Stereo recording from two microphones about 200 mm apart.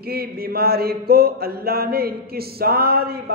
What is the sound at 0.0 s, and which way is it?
Mantra, 50° right (ahead or behind).